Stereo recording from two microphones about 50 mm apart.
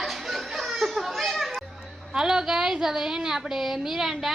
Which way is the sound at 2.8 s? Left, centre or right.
Centre.